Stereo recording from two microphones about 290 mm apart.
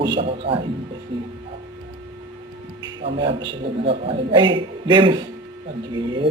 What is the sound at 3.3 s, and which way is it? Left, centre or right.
Speech, right.